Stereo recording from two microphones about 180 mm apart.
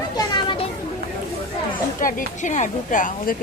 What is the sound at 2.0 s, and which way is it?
A woman's voice, 50° left (ahead or behind).